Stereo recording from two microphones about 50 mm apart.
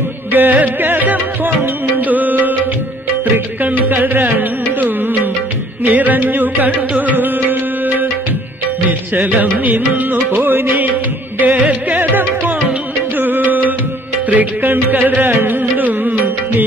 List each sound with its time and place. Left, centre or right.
0.3 s music: right
9.1 s music: right